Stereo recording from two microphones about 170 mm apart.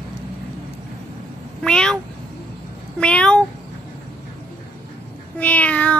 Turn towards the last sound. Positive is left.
turn(degrees=10)  # may be behind; listen again after turning